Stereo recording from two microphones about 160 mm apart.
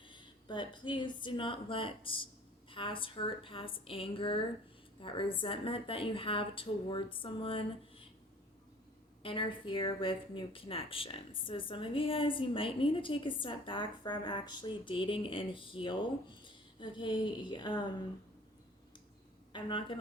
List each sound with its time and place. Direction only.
0.1 s speech: 30° left (ahead or behind)
9.2 s speech: 35° left (ahead or behind)
19.5 s speech: 30° left (ahead or behind)